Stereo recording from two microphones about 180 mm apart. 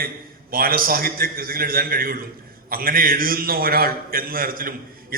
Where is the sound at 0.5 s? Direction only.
55° right (ahead or behind).